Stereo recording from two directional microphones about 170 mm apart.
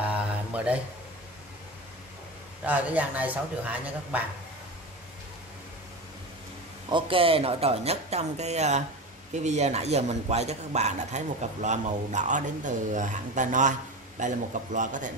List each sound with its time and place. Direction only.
0.0 s a sound: 10° right (ahead or behind)
2.6 s speech: 10° right (ahead or behind)
6.9 s a man's voice: 30° right (ahead or behind); by 15.1 s 50° right (ahead or behind)